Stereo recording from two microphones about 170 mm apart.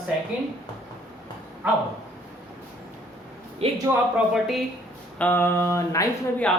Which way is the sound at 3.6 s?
35° right (ahead or behind).